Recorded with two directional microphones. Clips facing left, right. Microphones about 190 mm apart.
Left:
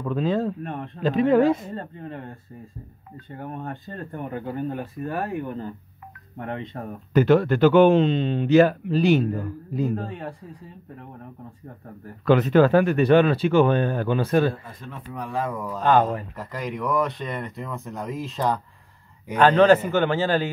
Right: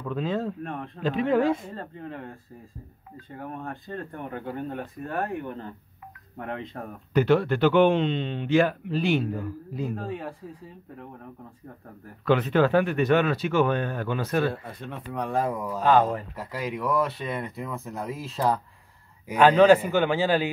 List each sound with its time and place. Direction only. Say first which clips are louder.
0.1 s speech: left 4 dB; 35° left (ahead or behind)
0.7 s speech: left 2 dB; centre (ahead or behind)
1.0 s speech: left 5 dB; 40° left (ahead or behind)
1.8 s speech: left 2 dB; centre (ahead or behind)
7.2 s speech: left 4 dB; 45° left (ahead or behind)
9.9 s speech: left 1 dB; centre (ahead or behind)
12.3 s speech: left 4 dB; 40° left (ahead or behind)
14.5 s speech: right 1 dB; 70° right (ahead or behind)
15.5 s speech: left 2 dB; 10° right (ahead or behind)